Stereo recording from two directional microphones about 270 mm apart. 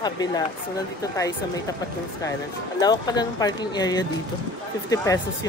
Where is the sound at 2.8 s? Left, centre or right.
Centre.